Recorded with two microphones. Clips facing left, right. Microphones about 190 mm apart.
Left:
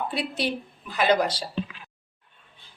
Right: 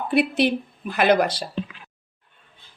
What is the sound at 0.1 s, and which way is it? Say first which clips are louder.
A woman's voice: right 8 dB; 55° right (ahead or behind).